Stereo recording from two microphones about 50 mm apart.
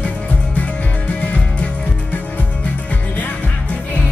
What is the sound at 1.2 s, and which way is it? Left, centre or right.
Music, left.